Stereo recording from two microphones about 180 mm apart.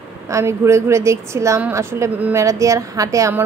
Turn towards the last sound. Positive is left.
turn(degrees=-15)  # may be behind; listen again after turning